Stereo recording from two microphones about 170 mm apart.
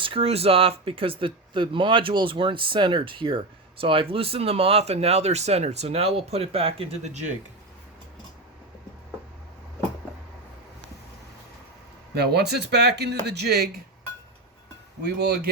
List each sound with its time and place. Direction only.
0.0 s speech: 35° right (ahead or behind)
12.1 s speech: 75° right (ahead or behind)
15.0 s speech: 75° right (ahead or behind)